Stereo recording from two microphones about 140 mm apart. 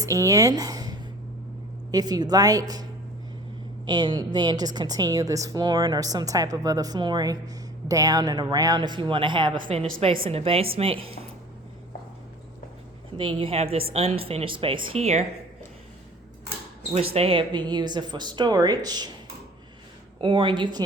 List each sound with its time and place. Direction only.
0.0 s a woman's voice: 25° right (ahead or behind)
3.8 s a woman's voice: 30° right (ahead or behind)
13.1 s a woman's voice: 40° right (ahead or behind)
17.2 s speech: 40° right (ahead or behind)
20.2 s speech: 35° right (ahead or behind)